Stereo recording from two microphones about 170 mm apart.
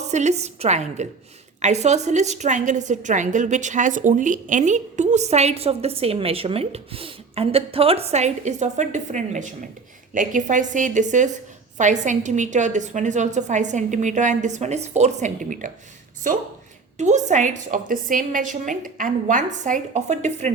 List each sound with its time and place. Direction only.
0.1 s a woman's voice: 45° right (ahead or behind)
17.0 s a woman's voice: 45° right (ahead or behind)